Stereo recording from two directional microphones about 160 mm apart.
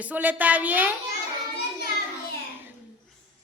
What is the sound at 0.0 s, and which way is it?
Speech, 10° right (ahead or behind).